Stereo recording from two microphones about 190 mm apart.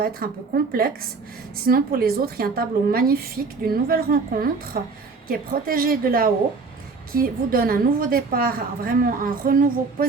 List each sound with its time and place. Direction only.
0.0 s a woman's voice: 50° right (ahead or behind)